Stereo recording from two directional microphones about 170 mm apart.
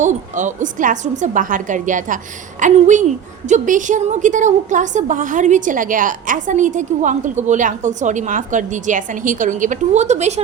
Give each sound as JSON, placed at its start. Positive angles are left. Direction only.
{"t": 0.0, "sound": "a woman's voice", "side_deg": -45}